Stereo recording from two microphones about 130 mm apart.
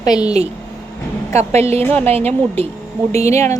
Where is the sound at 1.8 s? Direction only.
15° left (ahead or behind).